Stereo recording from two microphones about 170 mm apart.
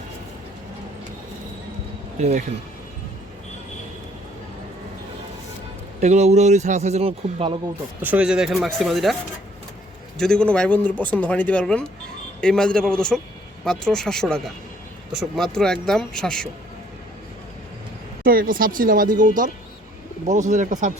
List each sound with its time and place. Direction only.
2.1 s speech: 45° right (ahead or behind)
6.0 s speech: 40° right (ahead or behind)
8.0 s speech: 10° right (ahead or behind)
10.2 s speech: 5° left (ahead or behind)
18.2 s speech: 55° right (ahead or behind)